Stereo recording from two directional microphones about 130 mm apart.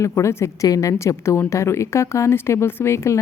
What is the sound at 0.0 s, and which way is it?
Speech, 20° left (ahead or behind).